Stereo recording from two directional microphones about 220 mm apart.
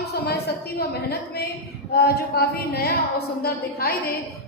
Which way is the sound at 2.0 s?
45° left (ahead or behind).